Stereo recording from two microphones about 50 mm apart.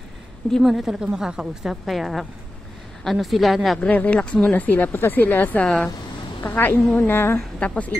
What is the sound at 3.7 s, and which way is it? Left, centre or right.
Speech, left.